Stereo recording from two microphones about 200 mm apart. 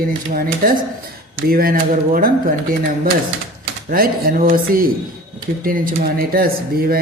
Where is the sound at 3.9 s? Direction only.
45° right (ahead or behind).